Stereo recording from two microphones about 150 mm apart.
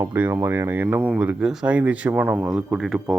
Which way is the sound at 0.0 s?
15° right (ahead or behind).